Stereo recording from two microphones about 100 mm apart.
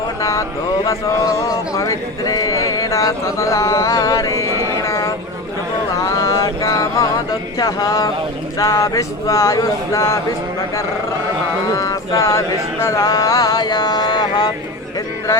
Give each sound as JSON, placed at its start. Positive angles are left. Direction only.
{"t": 0.2, "sound": "speech", "side_deg": 30}
{"t": 1.7, "sound": "speech", "side_deg": 30}
{"t": 6.1, "sound": "mantra", "side_deg": 35}
{"t": 7.6, "sound": "speech", "side_deg": 40}
{"t": 11.8, "sound": "speech", "side_deg": 40}
{"t": 13.1, "sound": "a sound", "side_deg": 35}